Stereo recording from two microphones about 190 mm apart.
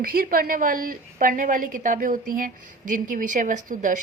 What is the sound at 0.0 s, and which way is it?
A woman's voice, 50° right (ahead or behind).